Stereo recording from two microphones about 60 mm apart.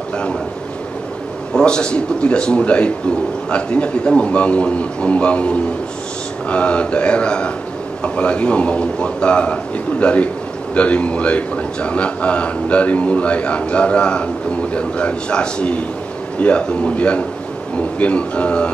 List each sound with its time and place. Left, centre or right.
1.5 s a man's voice: centre